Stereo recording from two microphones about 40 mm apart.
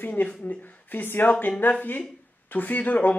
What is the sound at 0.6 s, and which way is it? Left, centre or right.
A man's voice, left.